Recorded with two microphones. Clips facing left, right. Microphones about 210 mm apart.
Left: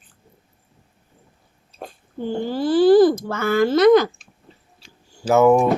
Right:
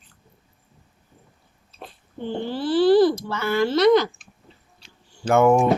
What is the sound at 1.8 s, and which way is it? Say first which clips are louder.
A child's voice: left 4 dB; 45° left (ahead or behind).